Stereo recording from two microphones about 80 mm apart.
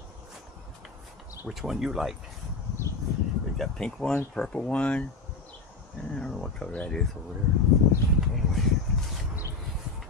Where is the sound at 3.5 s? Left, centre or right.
Centre.